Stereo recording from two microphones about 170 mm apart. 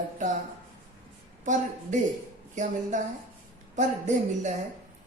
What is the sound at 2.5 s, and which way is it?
Speech, 45° right (ahead or behind).